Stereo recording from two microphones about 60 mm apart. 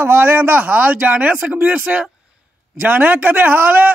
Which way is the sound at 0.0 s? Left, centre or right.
Right.